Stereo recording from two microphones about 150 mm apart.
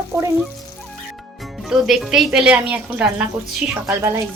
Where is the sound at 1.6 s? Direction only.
Centre (ahead or behind).